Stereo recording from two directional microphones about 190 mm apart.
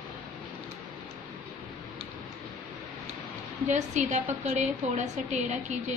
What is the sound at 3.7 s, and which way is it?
A woman's voice, 40° right (ahead or behind).